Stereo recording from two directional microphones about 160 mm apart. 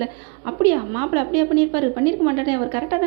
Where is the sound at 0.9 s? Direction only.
25° right (ahead or behind).